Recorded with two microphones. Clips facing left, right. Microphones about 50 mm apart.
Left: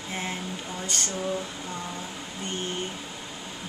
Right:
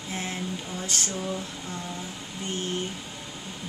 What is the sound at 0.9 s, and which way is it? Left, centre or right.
Speech, centre.